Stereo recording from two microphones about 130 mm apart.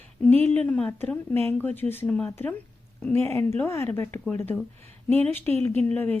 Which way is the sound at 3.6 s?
15° left (ahead or behind).